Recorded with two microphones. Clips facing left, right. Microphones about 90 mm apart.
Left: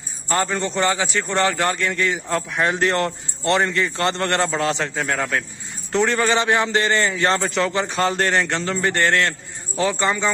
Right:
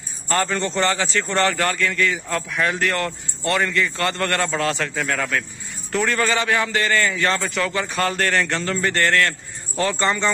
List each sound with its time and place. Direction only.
0.3 s a man's voice: 15° left (ahead or behind)